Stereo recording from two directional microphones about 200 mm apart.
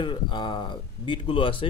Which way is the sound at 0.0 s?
25° left (ahead or behind).